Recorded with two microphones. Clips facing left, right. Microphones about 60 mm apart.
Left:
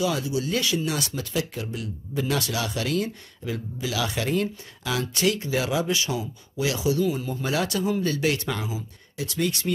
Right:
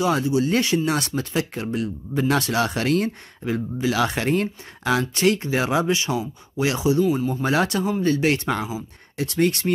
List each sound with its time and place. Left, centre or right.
0.0 s speech: right
7.4 s speech: right
9.1 s speech: right